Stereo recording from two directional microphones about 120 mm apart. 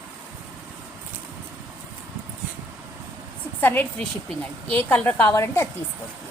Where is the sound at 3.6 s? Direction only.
15° left (ahead or behind).